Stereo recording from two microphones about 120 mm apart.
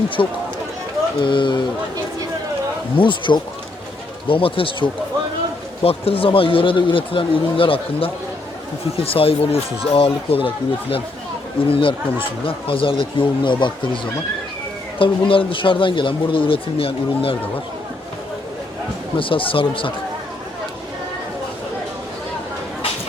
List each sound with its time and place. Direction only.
0.2 s speech: 40° left (ahead or behind)
3.0 s speech: 40° left (ahead or behind)
19.1 s speech: 45° left (ahead or behind)